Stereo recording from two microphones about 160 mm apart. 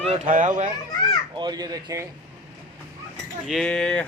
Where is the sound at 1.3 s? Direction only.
25° right (ahead or behind).